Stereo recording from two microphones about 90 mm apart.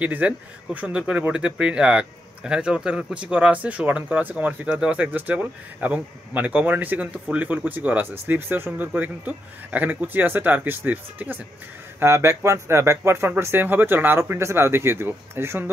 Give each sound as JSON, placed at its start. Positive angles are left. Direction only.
{"t": 0.0, "sound": "speech", "side_deg": -15}